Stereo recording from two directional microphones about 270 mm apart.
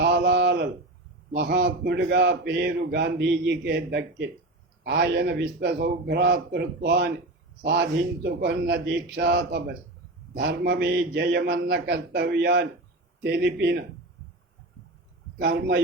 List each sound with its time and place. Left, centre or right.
0.0 s a sound: right
1.3 s a man's voice: right
15.4 s a man's voice: right